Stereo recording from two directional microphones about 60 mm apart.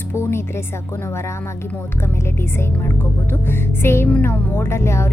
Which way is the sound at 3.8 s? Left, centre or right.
Left.